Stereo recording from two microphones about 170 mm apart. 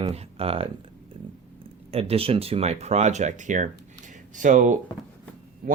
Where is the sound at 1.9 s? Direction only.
35° right (ahead or behind).